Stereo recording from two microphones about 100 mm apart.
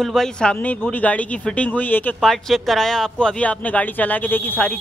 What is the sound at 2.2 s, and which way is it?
Speech, 5° left (ahead or behind).